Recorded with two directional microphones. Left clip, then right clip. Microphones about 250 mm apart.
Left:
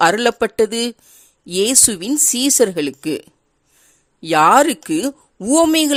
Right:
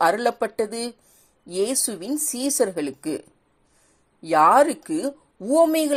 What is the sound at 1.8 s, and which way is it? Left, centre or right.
Speech, left.